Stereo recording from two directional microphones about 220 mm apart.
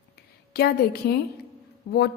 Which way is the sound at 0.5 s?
45° left (ahead or behind).